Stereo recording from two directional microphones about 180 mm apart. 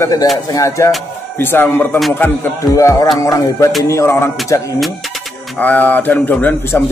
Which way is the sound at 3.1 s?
20° left (ahead or behind).